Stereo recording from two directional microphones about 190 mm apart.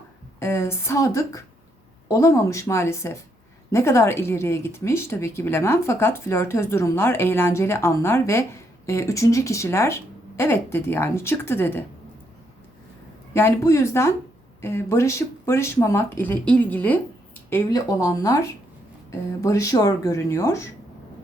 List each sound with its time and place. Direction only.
0.3 s speech: 15° left (ahead or behind)
13.3 s speech: 15° left (ahead or behind)